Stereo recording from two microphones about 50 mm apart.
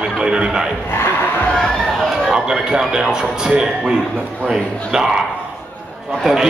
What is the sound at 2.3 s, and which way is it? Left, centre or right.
A man's voice, centre.